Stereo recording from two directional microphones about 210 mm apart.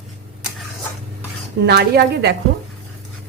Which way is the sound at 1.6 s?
50° right (ahead or behind).